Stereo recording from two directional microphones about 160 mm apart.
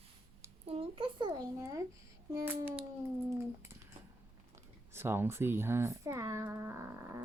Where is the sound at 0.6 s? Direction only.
35° right (ahead or behind).